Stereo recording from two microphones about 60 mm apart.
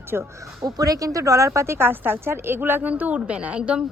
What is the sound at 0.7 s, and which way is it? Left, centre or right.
A woman's voice, right.